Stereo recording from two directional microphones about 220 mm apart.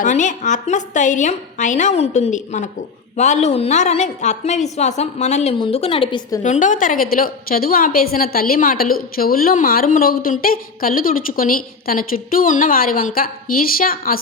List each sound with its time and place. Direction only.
0.0 s a woman's voice: 35° left (ahead or behind)
6.4 s a woman's voice: 35° left (ahead or behind)